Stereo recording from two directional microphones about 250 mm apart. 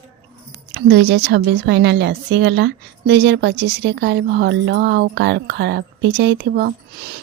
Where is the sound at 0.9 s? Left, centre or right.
Right.